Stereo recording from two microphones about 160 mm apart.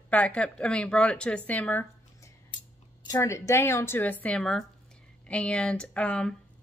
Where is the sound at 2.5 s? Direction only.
30° left (ahead or behind).